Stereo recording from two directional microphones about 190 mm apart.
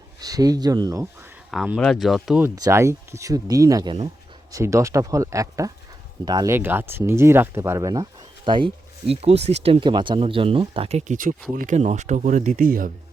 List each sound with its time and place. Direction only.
0.2 s speech: 20° right (ahead or behind)
1.5 s speech: 5° right (ahead or behind)
2.6 s speech: 15° right (ahead or behind); by 12.9 s 45° right (ahead or behind)